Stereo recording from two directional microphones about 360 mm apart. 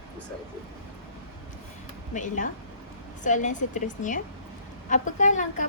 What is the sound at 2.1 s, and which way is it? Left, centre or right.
A woman's voice, left.